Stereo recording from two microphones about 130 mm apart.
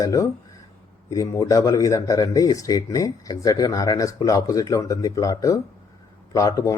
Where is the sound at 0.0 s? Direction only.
25° left (ahead or behind).